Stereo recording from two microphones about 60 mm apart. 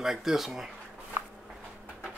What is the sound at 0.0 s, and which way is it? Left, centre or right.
Speech, centre.